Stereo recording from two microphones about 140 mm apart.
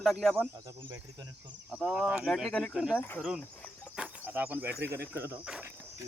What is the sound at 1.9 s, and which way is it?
Speech, 5° right (ahead or behind).